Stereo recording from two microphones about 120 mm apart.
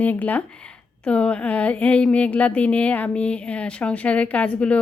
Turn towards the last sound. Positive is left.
turn(degrees=10)  # may be behind; listen again after turning